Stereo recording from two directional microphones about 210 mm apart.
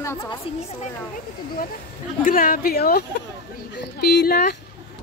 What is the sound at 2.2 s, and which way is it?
Speech, 45° left (ahead or behind).